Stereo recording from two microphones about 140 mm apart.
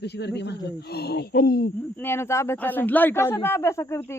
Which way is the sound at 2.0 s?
20° left (ahead or behind).